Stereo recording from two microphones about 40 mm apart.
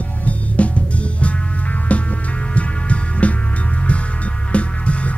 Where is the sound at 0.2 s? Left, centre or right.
Left.